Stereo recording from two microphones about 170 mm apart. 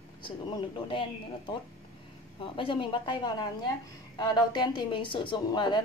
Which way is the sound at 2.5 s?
30° left (ahead or behind).